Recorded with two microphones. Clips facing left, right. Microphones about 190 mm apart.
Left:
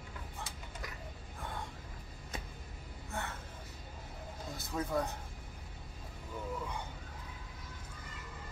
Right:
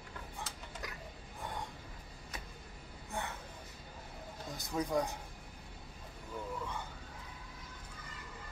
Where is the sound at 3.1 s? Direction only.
15° right (ahead or behind).